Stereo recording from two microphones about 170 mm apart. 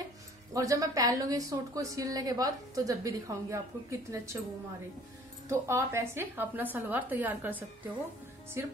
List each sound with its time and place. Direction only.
0.5 s a woman's voice: 20° right (ahead or behind)
5.5 s a woman's voice: 15° right (ahead or behind)